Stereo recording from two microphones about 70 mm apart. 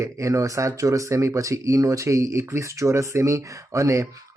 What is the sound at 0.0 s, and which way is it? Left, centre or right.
Speech, right.